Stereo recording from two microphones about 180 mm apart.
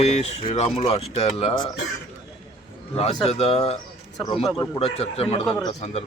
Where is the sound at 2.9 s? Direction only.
35° left (ahead or behind).